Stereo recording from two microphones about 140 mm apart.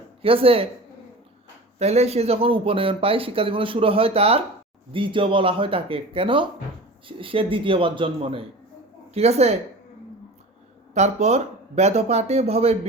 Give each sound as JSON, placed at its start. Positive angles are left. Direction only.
{"t": 0.2, "sound": "speech", "side_deg": -40}
{"t": 1.8, "sound": "speech", "side_deg": -50}
{"t": 10.9, "sound": "speech", "side_deg": -55}